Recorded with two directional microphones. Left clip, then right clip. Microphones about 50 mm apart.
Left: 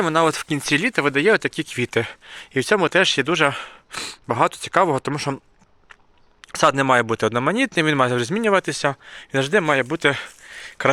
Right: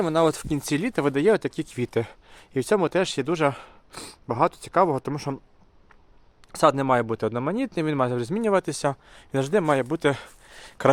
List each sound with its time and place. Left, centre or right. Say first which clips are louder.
0.0 s speech: left 3 dB; centre
0.4 s speech: left 6 dB; centre
0.9 s speech: left 3 dB; right
1.4 s speech: left 5 dB; right; by 4.7 s centre
4.7 s speech: left 3 dB; centre
6.4 s speech: left 3 dB; centre
8.4 s speech: left 3 dB; centre; by 10.3 s right